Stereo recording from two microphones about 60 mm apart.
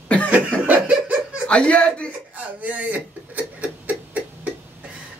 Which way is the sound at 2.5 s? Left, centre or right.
Right.